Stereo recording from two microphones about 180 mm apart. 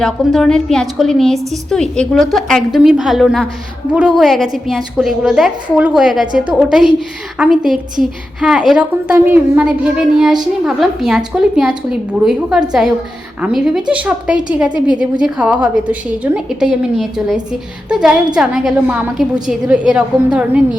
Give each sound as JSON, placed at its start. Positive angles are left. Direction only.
{"t": 0.0, "sound": "a woman's voice", "side_deg": 0}